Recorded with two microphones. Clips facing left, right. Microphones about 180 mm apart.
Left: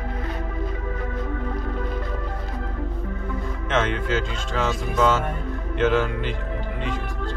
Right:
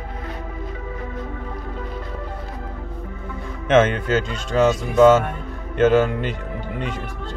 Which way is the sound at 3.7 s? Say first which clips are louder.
Right 7 dB; 50° right (ahead or behind).